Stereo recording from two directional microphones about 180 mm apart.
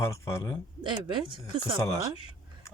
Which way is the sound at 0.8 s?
25° right (ahead or behind).